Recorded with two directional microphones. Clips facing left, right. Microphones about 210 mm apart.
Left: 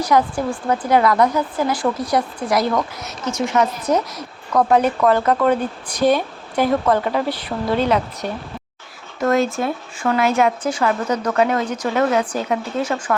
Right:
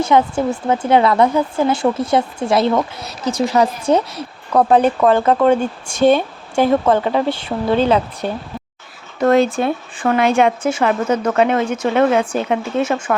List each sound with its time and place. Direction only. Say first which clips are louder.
0.0 s a woman's voice: right 3 dB; 25° right (ahead or behind)